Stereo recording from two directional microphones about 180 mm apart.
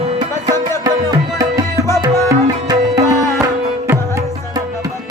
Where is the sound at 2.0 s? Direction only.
20° right (ahead or behind).